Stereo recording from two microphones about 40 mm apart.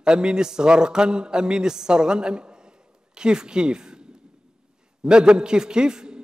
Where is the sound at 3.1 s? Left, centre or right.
Centre.